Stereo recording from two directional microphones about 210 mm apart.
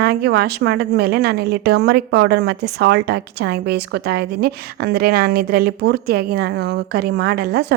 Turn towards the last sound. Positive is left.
turn(degrees=-50)  # may be behind; listen again after turning